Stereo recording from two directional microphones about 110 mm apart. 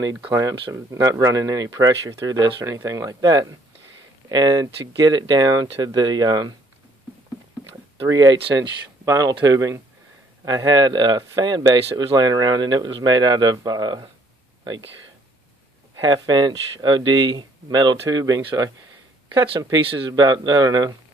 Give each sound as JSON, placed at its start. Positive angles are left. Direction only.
{"t": 0.3, "sound": "speech", "side_deg": -35}
{"t": 8.1, "sound": "speech", "side_deg": -35}
{"t": 16.0, "sound": "speech", "side_deg": -40}
{"t": 19.3, "sound": "speech", "side_deg": -55}
{"t": 20.1, "sound": "speech", "side_deg": -35}